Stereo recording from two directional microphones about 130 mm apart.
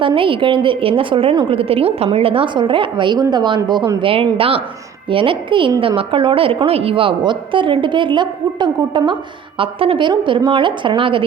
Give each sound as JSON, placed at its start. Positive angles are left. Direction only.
{"t": 0.0, "sound": "a woman's voice", "side_deg": -40}